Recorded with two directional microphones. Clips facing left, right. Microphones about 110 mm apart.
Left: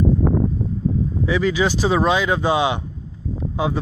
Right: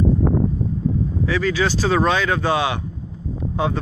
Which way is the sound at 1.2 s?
15° left (ahead or behind).